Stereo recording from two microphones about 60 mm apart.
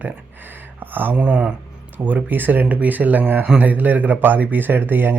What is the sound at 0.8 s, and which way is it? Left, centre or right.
Speech, right.